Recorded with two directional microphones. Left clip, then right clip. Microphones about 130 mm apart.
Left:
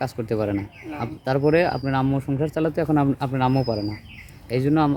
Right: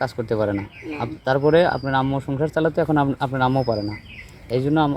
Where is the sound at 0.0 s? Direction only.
10° left (ahead or behind).